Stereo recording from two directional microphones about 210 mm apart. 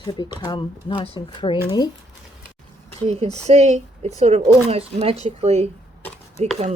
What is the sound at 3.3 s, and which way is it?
Speech, 30° right (ahead or behind).